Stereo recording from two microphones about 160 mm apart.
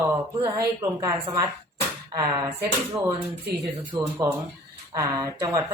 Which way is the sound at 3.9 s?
20° right (ahead or behind).